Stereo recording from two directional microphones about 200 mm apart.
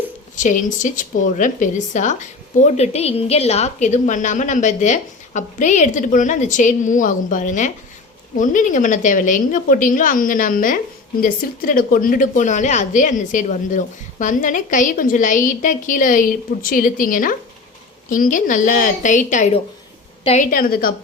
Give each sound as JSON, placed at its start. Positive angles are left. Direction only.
{"t": 0.3, "sound": "a woman's voice", "side_deg": 40}